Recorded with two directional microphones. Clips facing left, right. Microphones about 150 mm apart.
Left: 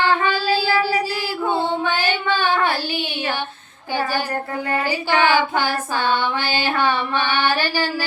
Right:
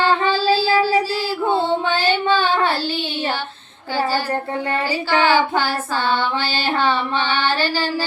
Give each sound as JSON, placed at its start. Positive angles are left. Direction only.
{"t": 0.0, "sound": "child singing", "side_deg": 15}
{"t": 1.9, "sound": "child singing", "side_deg": 15}
{"t": 5.2, "sound": "music", "side_deg": 15}